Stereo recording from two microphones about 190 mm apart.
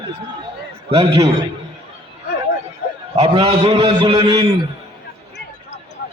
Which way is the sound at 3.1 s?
30° right (ahead or behind).